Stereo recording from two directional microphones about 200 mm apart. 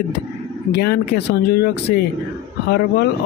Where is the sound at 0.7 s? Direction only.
55° left (ahead or behind).